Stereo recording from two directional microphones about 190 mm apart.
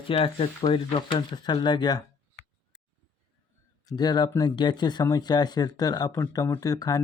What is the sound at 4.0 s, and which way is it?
Speech, 20° left (ahead or behind).